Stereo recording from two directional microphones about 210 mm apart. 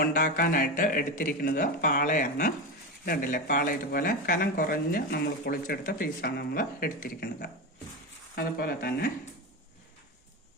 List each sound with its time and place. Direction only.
0.0 s speech: 40° left (ahead or behind)